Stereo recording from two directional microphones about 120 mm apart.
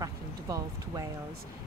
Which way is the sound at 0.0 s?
30° right (ahead or behind).